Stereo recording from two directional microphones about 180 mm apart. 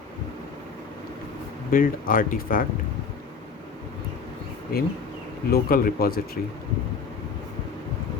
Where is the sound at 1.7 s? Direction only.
50° left (ahead or behind).